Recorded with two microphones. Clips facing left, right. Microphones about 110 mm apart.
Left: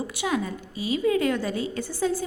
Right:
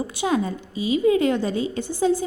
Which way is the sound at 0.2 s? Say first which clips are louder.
Right 5 dB; 30° right (ahead or behind).